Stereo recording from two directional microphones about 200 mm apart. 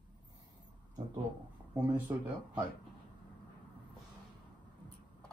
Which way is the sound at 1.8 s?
10° right (ahead or behind).